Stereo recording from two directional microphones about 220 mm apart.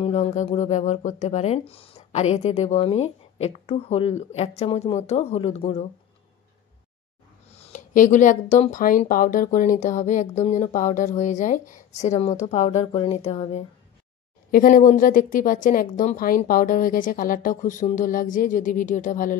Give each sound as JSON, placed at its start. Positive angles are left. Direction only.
{"t": 0.0, "sound": "speech", "side_deg": 30}
{"t": 7.5, "sound": "speech", "side_deg": 30}
{"t": 14.5, "sound": "speech", "side_deg": 40}